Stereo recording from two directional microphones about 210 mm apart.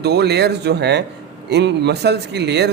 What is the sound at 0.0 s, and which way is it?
Speech, 50° right (ahead or behind).